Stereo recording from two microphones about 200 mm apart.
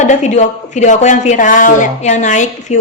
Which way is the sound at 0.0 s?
35° left (ahead or behind).